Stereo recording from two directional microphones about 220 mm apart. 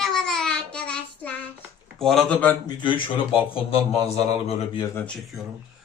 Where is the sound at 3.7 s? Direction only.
25° left (ahead or behind).